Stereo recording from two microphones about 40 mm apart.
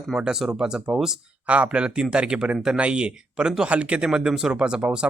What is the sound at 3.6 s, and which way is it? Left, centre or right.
Speech, right.